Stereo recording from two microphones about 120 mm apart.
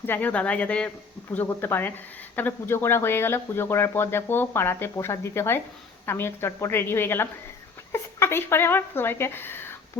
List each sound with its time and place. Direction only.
0.0 s speech: 15° left (ahead or behind)